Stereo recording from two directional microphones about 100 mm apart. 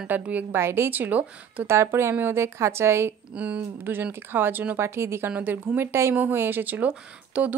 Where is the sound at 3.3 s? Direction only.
10° right (ahead or behind).